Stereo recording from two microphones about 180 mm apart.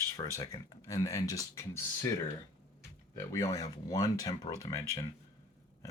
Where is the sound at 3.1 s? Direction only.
15° left (ahead or behind).